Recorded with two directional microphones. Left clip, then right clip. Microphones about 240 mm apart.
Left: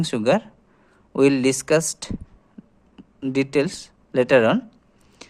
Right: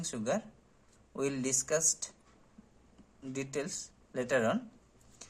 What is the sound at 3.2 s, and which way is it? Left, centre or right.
Speech, left.